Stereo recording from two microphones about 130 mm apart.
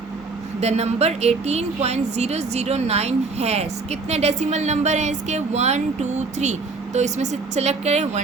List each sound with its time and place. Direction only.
0.6 s speech: 55° right (ahead or behind)